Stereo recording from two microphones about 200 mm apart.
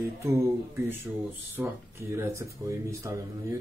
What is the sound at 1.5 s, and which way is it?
Speech, 10° right (ahead or behind).